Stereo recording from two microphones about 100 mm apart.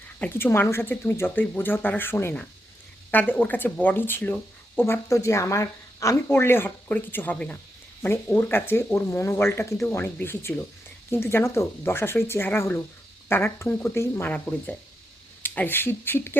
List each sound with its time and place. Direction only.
0.2 s speech: 20° left (ahead or behind)
4.8 s speech: 30° left (ahead or behind)
14.3 s speech: 15° left (ahead or behind)